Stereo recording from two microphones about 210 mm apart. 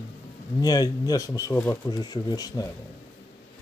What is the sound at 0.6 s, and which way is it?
Speech, 20° left (ahead or behind).